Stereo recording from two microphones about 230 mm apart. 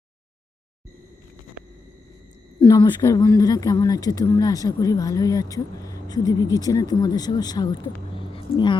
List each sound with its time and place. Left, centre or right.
2.6 s speech: centre